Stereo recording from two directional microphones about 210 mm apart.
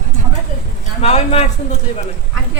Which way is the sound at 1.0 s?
30° left (ahead or behind).